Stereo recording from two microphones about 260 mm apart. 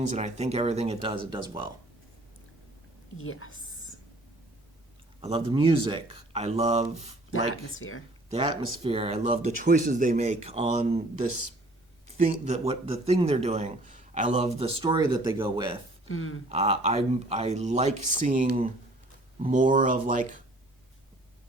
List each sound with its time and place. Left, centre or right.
0.1 s speech: right
3.2 s a woman's voice: left
5.2 s speech: centre
7.8 s a woman's voice: left
8.3 s speech: right
16.0 s a woman's voice: left
16.5 s speech: right